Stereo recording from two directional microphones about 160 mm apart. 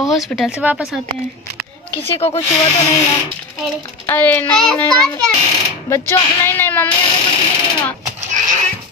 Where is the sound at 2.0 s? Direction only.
40° left (ahead or behind).